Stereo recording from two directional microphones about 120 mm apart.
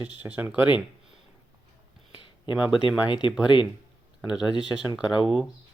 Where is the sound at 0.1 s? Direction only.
15° right (ahead or behind).